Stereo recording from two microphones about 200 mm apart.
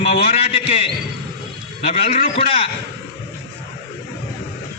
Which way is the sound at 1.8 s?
30° left (ahead or behind).